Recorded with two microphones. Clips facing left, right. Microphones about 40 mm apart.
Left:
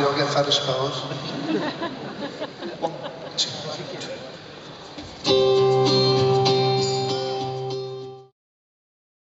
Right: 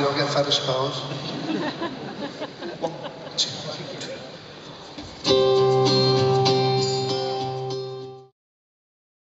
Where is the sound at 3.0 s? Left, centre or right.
Centre.